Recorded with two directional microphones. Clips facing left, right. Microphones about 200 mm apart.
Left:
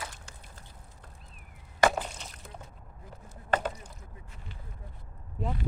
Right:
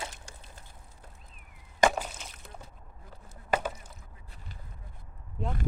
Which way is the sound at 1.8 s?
Centre (ahead or behind).